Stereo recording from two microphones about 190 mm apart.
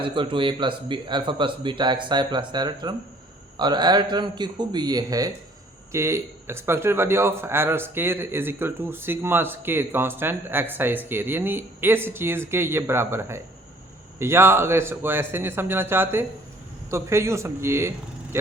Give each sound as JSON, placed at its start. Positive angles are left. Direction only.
{"t": 0.0, "sound": "speech", "side_deg": -25}